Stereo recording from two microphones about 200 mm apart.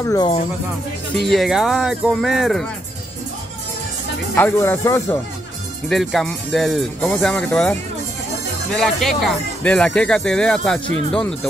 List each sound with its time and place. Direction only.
0.0 s speech: 20° left (ahead or behind)
1.2 s speech: centre (ahead or behind)
4.4 s speech: 10° left (ahead or behind)
5.9 s speech: centre (ahead or behind)
8.7 s speech: centre (ahead or behind)